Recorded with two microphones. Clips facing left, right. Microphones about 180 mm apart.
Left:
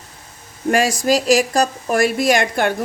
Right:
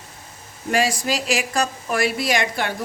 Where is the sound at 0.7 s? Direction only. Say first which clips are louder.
Left 5 dB; 45° left (ahead or behind).